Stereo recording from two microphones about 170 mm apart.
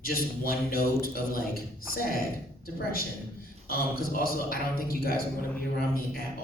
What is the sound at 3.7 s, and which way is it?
A man's voice, 60° left (ahead or behind).